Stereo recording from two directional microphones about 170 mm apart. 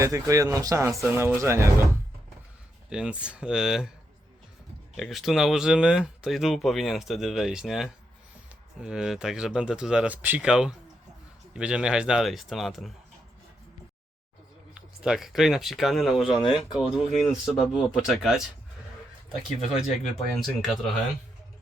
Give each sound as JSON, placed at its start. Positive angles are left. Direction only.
{"t": 0.0, "sound": "speech", "side_deg": -20}
{"t": 2.9, "sound": "speech", "side_deg": -5}
{"t": 4.9, "sound": "speech", "side_deg": 0}
{"t": 14.8, "sound": "speech", "side_deg": -5}
{"t": 16.3, "sound": "speech", "side_deg": 30}
{"t": 16.7, "sound": "speech", "side_deg": 0}
{"t": 20.3, "sound": "speech", "side_deg": 0}